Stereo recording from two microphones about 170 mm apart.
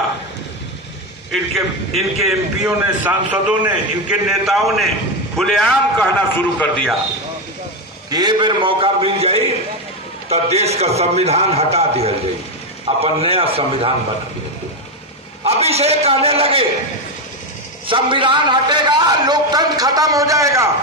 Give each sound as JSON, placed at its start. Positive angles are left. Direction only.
{"t": 1.5, "sound": "a man's voice", "side_deg": 0}
{"t": 8.1, "sound": "a man's voice", "side_deg": -25}
{"t": 15.4, "sound": "a man's voice", "side_deg": -35}
{"t": 17.8, "sound": "a man's voice", "side_deg": -30}